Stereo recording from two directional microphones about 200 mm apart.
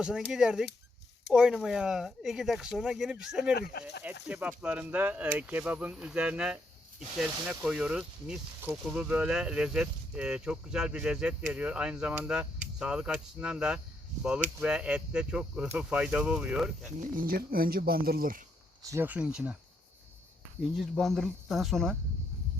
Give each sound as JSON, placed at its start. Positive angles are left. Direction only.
{"t": 0.3, "sound": "speech", "side_deg": -5}
{"t": 17.0, "sound": "speech", "side_deg": -45}
{"t": 18.9, "sound": "speech", "side_deg": -10}
{"t": 20.6, "sound": "speech", "side_deg": 0}